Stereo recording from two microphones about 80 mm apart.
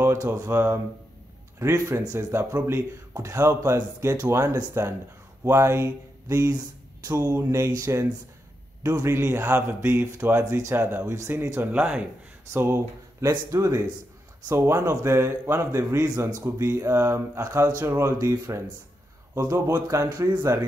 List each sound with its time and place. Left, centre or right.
0.0 s a man's voice: right
11.6 s speech: centre
12.5 s speech: right
13.3 s speech: right
14.5 s a man's voice: right
19.3 s a man's voice: right